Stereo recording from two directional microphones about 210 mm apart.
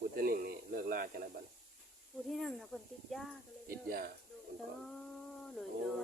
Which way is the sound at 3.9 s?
45° right (ahead or behind).